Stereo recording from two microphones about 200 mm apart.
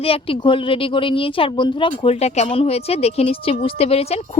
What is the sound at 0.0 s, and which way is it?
Speech, 25° left (ahead or behind).